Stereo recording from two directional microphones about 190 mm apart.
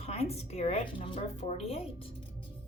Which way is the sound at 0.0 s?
35° left (ahead or behind).